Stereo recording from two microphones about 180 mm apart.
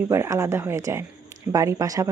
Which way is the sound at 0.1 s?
15° right (ahead or behind).